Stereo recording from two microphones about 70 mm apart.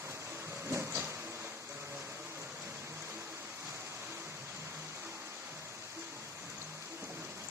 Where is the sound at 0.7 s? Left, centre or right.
Right.